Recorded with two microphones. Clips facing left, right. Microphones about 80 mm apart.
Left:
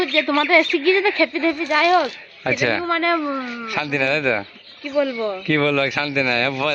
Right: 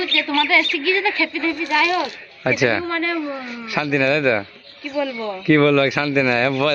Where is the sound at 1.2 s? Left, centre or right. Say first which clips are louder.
Left 3 dB; left.